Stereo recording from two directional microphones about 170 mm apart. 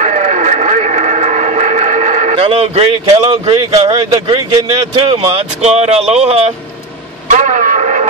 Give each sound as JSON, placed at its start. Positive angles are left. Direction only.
{"t": 0.0, "sound": "radio", "side_deg": -45}
{"t": 4.9, "sound": "speech", "side_deg": -30}
{"t": 5.6, "sound": "speech", "side_deg": -40}
{"t": 7.2, "sound": "radio", "side_deg": -45}